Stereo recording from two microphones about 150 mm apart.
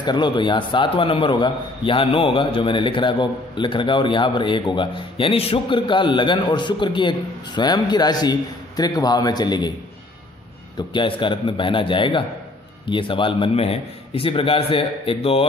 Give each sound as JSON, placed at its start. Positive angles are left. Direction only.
{"t": 0.0, "sound": "a man's voice", "side_deg": 30}
{"t": 10.8, "sound": "a man's voice", "side_deg": 30}